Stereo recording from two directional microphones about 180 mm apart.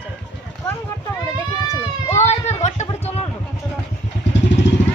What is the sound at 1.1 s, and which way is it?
Speech, 20° left (ahead or behind).